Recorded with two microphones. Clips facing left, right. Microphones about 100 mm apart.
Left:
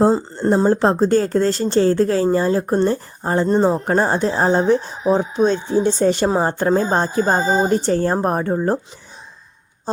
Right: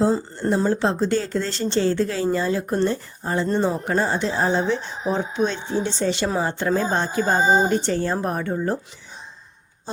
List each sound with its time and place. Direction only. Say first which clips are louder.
0.1 s speech: left 4 dB; 30° left (ahead or behind)
0.5 s speech: left 5 dB; 40° left (ahead or behind)